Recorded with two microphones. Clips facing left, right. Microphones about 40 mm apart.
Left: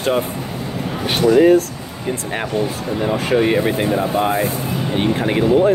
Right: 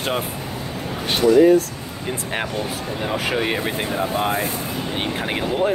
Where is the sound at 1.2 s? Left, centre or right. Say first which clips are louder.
Left 1 dB; left.